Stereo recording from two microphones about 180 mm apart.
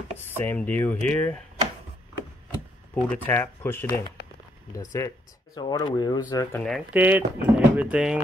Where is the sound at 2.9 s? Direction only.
10° left (ahead or behind).